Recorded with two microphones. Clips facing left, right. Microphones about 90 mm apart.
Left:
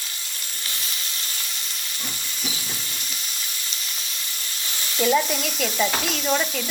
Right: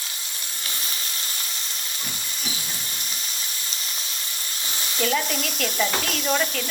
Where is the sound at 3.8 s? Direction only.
40° right (ahead or behind).